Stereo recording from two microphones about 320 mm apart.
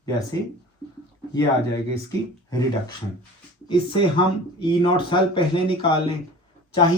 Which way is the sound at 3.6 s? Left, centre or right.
Centre.